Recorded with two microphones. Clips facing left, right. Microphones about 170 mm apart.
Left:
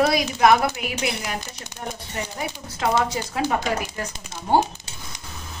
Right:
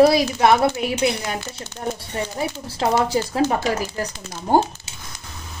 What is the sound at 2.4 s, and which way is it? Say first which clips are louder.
Speech: right 5 dB; 30° right (ahead or behind).